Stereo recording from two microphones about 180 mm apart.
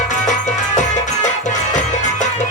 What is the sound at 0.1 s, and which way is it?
Music, 40° left (ahead or behind).